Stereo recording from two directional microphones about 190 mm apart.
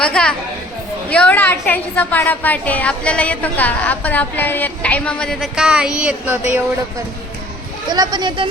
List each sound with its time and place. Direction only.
0.0 s a woman's voice: 5° left (ahead or behind)
7.9 s speech: 20° right (ahead or behind)